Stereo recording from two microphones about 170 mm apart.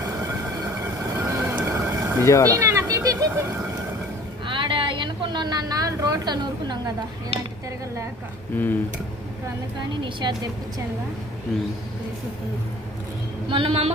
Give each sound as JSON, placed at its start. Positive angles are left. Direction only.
{"t": 0.8, "sound": "vehicle", "side_deg": -15}
{"t": 2.2, "sound": "speech", "side_deg": 15}
{"t": 2.5, "sound": "cat", "side_deg": -15}
{"t": 4.4, "sound": "a sound", "side_deg": -30}
{"t": 10.0, "sound": "a woman's voice", "side_deg": -25}
{"t": 13.5, "sound": "speech", "side_deg": -35}